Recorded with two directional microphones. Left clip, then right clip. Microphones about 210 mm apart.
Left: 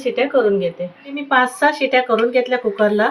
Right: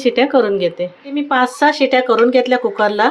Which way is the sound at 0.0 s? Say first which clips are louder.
Right 3 dB; 55° right (ahead or behind).